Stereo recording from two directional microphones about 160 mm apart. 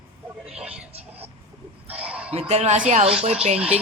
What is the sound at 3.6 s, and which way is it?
Speech, 10° right (ahead or behind).